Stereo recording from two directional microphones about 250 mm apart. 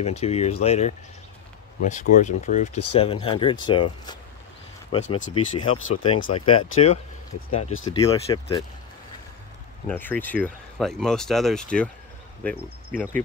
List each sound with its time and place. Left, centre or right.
0.2 s speech: left
9.8 s speech: centre